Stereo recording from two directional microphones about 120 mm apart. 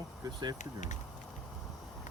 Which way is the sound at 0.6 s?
90° left.